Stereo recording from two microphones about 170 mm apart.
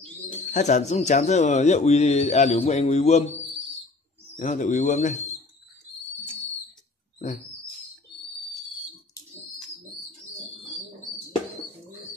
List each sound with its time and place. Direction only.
0.5 s a man's voice: 45° left (ahead or behind)